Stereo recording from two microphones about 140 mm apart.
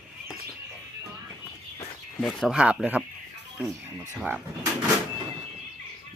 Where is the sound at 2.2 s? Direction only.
Centre (ahead or behind).